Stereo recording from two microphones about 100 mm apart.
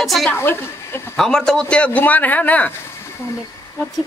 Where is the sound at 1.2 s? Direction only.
5° left (ahead or behind).